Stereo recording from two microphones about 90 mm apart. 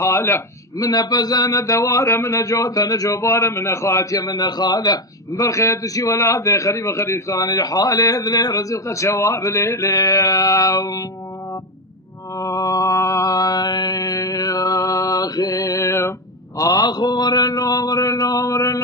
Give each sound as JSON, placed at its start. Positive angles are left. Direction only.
{"t": 0.0, "sound": "a man's voice", "side_deg": 30}
{"t": 0.8, "sound": "a man's voice", "side_deg": 45}
{"t": 5.4, "sound": "a man's voice", "side_deg": 35}
{"t": 9.9, "sound": "a sound", "side_deg": 45}
{"t": 12.4, "sound": "mantra", "side_deg": 40}
{"t": 16.6, "sound": "a sound", "side_deg": 40}